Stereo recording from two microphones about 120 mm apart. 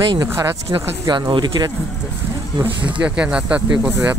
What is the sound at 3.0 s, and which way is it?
Speech, 10° right (ahead or behind).